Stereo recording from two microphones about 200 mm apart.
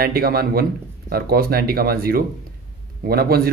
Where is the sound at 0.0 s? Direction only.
50° right (ahead or behind).